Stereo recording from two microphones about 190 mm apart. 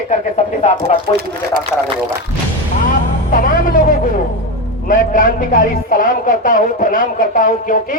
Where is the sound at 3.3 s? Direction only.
45° left (ahead or behind).